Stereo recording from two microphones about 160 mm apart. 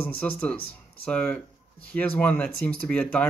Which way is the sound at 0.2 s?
10° left (ahead or behind).